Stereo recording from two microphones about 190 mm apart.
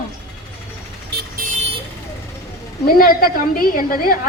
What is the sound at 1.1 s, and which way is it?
Vehicle, 60° right (ahead or behind).